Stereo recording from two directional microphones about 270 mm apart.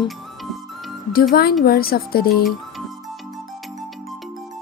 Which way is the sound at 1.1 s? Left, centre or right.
Left.